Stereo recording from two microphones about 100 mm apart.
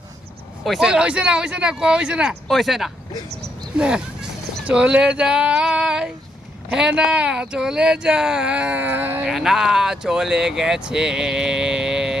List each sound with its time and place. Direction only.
0.6 s speech: 5° right (ahead or behind); by 9.2 s 20° right (ahead or behind)
9.2 s speech: 5° right (ahead or behind)